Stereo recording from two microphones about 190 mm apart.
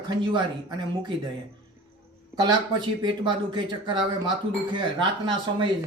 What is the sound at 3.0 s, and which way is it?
Speech, 25° right (ahead or behind).